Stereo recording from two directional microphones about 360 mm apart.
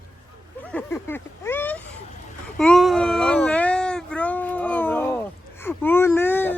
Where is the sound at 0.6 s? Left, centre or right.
Centre.